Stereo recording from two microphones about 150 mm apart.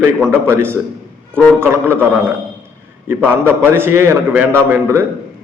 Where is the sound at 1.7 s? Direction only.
15° right (ahead or behind).